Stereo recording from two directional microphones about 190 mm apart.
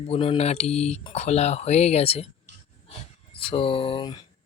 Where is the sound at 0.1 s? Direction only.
30° left (ahead or behind).